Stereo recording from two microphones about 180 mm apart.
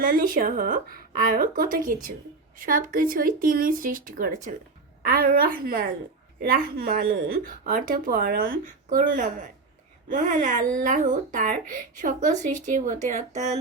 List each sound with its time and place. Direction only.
0.0 s a woman's voice: 50° right (ahead or behind)